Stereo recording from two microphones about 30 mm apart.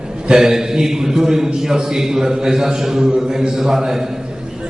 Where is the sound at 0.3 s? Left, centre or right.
Right.